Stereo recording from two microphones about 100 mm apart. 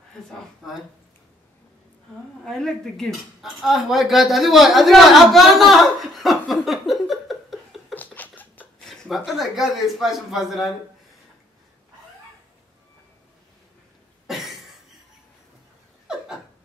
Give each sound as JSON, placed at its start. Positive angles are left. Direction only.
{"t": 0.6, "sound": "speech", "side_deg": 5}
{"t": 2.4, "sound": "speech", "side_deg": 5}
{"t": 7.9, "sound": "a sound", "side_deg": 15}
{"t": 8.8, "sound": "speech", "side_deg": 0}
{"t": 14.2, "sound": "cough", "side_deg": 0}